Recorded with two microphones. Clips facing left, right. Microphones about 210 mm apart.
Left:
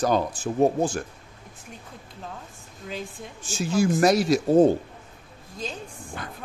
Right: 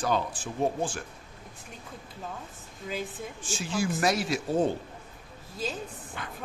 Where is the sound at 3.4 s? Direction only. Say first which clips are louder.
Left 8 dB; 40° left (ahead or behind).